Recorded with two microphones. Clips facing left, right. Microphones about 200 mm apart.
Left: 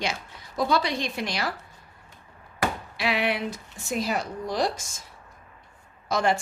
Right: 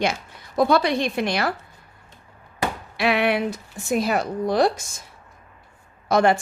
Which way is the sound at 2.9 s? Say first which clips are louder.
Right 9 dB; 60° right (ahead or behind).